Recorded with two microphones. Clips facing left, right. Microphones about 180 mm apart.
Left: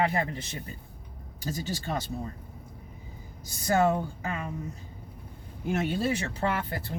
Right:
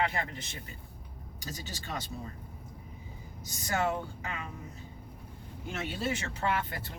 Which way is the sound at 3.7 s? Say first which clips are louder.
Left 7 dB; 40° left (ahead or behind).